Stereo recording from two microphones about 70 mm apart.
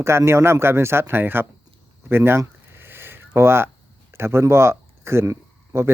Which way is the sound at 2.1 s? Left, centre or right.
Right.